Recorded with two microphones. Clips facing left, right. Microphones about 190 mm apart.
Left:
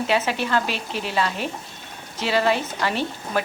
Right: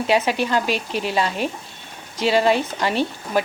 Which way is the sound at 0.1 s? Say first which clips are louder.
Right 4 dB; 15° right (ahead or behind).